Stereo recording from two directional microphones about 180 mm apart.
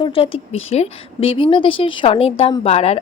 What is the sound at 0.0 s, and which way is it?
A woman's voice, 30° left (ahead or behind).